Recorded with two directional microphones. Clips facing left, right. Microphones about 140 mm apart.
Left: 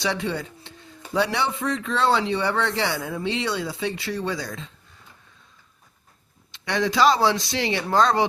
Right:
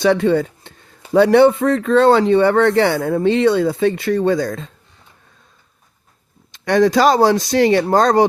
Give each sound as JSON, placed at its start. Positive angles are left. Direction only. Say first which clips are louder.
{"t": 0.0, "sound": "speech", "louder": "right 12 dB", "side_deg": -55}
{"t": 6.5, "sound": "speech", "louder": "right 11 dB", "side_deg": -50}